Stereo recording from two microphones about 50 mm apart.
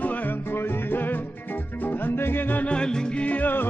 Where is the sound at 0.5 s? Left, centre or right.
Left.